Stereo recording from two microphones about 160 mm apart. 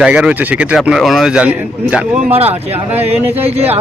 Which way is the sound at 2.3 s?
40° right (ahead or behind).